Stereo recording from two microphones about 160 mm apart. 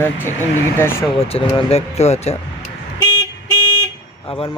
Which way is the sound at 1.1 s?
40° left (ahead or behind).